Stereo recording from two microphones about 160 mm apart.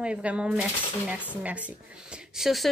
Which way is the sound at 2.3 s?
Centre (ahead or behind).